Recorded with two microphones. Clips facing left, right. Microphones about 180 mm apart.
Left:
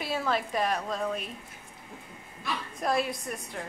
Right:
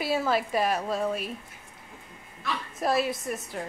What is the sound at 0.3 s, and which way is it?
A woman's voice, 5° right (ahead or behind).